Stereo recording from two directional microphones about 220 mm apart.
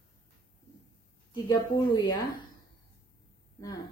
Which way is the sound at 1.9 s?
20° left (ahead or behind).